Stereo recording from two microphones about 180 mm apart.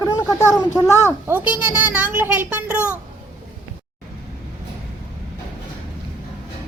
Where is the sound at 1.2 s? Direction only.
10° right (ahead or behind).